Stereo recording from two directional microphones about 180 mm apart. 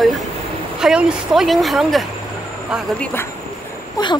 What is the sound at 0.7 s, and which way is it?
Speech, 5° right (ahead or behind).